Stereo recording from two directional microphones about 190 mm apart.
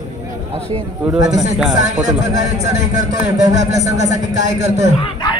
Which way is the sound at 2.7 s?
40° right (ahead or behind).